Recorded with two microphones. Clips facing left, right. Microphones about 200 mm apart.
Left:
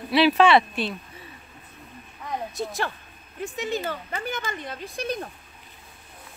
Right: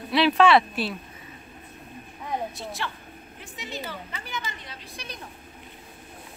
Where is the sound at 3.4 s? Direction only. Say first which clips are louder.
Left 9 dB; 50° left (ahead or behind).